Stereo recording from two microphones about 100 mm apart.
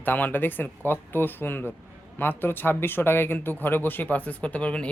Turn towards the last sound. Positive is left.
turn(degrees=10)  # may be behind; listen again after turning